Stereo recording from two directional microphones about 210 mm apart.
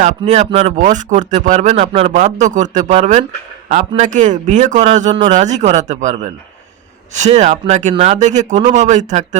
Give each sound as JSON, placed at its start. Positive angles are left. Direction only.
{"t": 0.0, "sound": "a man's voice", "side_deg": -35}